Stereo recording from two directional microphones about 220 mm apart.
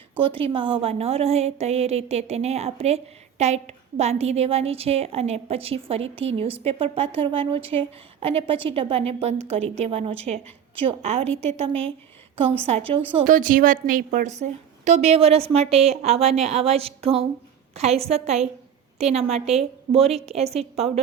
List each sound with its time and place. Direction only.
0.4 s a woman's voice: 25° right (ahead or behind)
13.1 s a woman's voice: 35° right (ahead or behind)